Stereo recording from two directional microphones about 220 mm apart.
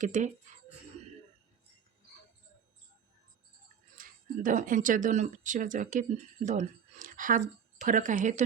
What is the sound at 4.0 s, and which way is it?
Speech, 35° right (ahead or behind).